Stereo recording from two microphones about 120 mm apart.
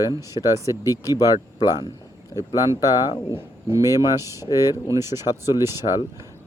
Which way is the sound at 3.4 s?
20° right (ahead or behind).